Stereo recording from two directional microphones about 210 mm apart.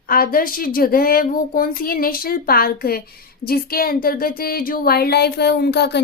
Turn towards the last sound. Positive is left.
turn(degrees=50)  # may be behind; listen again after turning